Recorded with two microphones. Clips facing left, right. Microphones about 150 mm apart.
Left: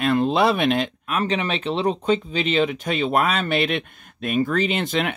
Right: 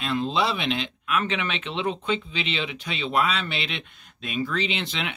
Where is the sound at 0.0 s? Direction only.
55° left (ahead or behind).